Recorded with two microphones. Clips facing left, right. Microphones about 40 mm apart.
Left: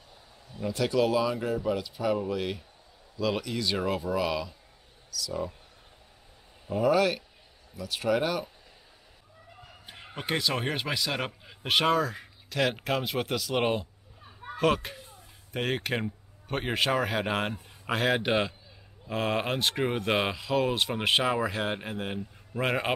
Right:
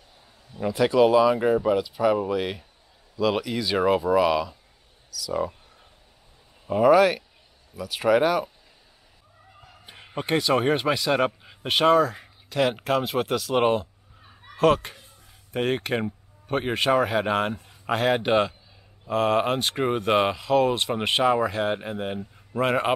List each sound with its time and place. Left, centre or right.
0.7 s speech: centre
1.3 s speech: right
1.8 s speech: centre
6.8 s speech: centre
9.8 s a man's voice: centre